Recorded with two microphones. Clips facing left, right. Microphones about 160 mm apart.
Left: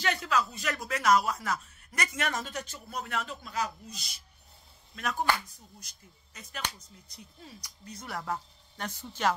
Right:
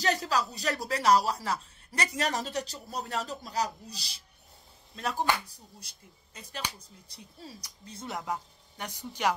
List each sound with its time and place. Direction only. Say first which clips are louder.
0.0 s speech: right 1 dB; 40° right (ahead or behind); by 9.3 s 15° right (ahead or behind)